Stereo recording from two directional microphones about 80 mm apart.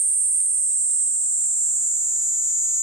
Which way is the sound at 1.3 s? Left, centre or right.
Centre.